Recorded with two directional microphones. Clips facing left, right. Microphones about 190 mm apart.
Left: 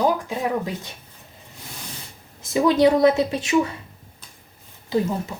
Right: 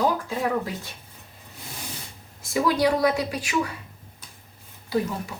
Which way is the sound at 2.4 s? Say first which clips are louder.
Left 5 dB; 20° left (ahead or behind).